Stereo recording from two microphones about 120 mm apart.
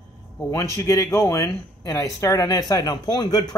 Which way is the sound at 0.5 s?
25° left (ahead or behind).